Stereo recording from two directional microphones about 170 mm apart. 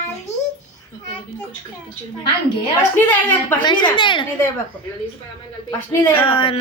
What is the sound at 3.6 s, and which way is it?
Speech, 30° left (ahead or behind).